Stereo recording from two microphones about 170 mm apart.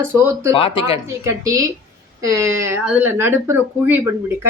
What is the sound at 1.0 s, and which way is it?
A woman's voice, 20° right (ahead or behind).